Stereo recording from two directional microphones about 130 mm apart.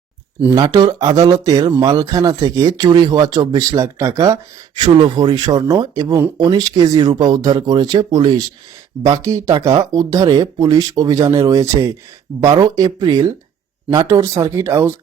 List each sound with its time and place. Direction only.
0.5 s speech: 30° right (ahead or behind)